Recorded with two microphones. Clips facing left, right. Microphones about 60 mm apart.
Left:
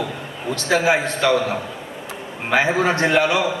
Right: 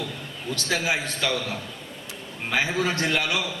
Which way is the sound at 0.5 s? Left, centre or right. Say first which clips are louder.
Left 8 dB; left.